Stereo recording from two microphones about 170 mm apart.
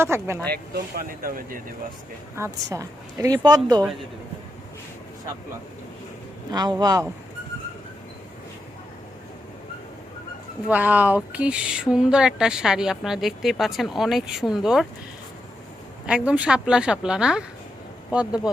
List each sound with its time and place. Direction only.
0.0 s speech: 15° right (ahead or behind)
0.4 s speech: 70° right (ahead or behind)
2.3 s a woman's voice: 15° right (ahead or behind)
6.5 s a woman's voice: 25° right (ahead or behind)
10.7 s speech: 10° right (ahead or behind)
16.0 s speech: 5° right (ahead or behind)